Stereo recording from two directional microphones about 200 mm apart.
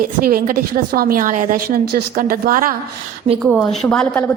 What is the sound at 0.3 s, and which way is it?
A woman's voice, 45° right (ahead or behind).